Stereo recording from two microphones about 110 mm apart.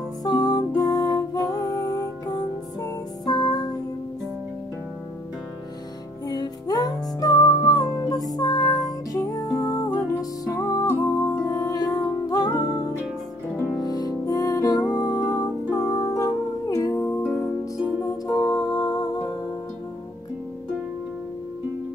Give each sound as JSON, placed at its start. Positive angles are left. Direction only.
{"t": 0.2, "sound": "music", "side_deg": 40}
{"t": 6.2, "sound": "music", "side_deg": 35}
{"t": 17.1, "sound": "music", "side_deg": 5}
{"t": 17.7, "sound": "music", "side_deg": 35}